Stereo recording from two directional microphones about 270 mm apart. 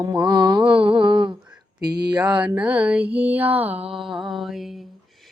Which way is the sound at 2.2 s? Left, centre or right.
Centre.